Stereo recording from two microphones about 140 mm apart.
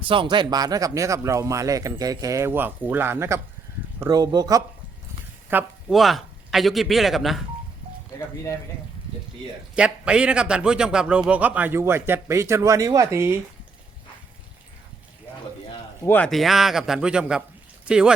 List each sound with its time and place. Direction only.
0.0 s speech: 35° right (ahead or behind)
5.5 s a man's voice: 15° right (ahead or behind)
5.9 s speech: centre (ahead or behind)
9.7 s a man's voice: 5° right (ahead or behind)
16.0 s speech: 10° left (ahead or behind)
16.3 s speech: centre (ahead or behind)